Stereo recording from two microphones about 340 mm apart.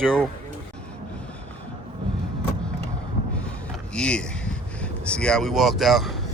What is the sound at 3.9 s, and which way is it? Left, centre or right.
Speech, centre.